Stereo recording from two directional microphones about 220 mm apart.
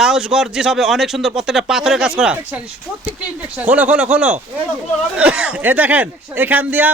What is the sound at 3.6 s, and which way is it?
A man's voice, 5° right (ahead or behind).